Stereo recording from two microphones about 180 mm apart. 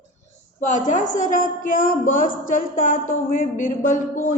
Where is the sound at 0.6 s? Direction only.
45° left (ahead or behind).